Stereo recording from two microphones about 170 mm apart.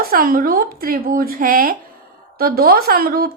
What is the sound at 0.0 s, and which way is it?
Speech, 60° right (ahead or behind).